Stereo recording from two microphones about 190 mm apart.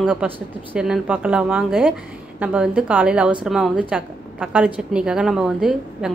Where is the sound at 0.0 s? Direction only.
5° right (ahead or behind).